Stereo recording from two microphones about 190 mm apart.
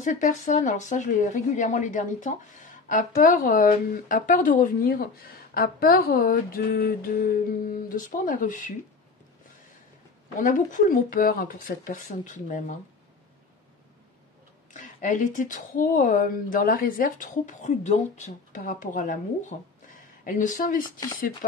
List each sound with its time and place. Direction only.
0.0 s speech: 40° left (ahead or behind)
10.4 s speech: 45° left (ahead or behind)
14.7 s speech: 40° left (ahead or behind)